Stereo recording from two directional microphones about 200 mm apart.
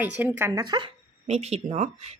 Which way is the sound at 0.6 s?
20° right (ahead or behind).